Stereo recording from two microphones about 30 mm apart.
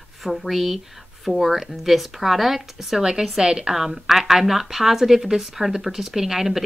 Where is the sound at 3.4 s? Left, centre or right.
Right.